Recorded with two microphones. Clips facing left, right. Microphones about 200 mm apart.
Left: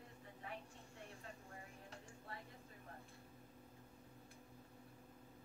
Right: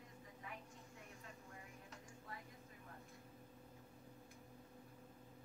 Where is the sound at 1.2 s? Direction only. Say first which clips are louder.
Left 2 dB; 35° left (ahead or behind).